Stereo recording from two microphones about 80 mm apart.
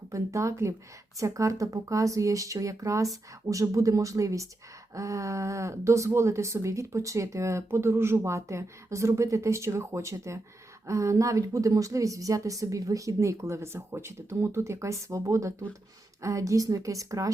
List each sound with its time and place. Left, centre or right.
0.1 s a woman's voice: right